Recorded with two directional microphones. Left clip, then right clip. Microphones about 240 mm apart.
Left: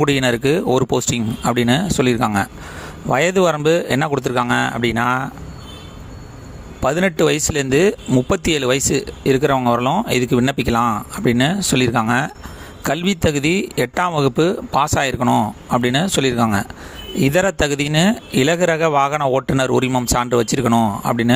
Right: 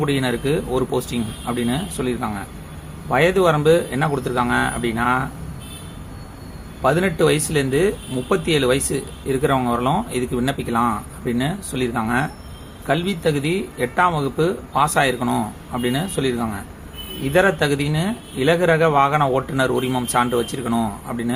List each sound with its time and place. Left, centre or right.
0.0 s speech: left
6.8 s speech: left